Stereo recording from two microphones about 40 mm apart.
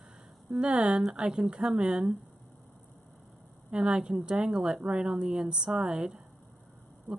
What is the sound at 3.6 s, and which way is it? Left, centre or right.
A woman's voice, right.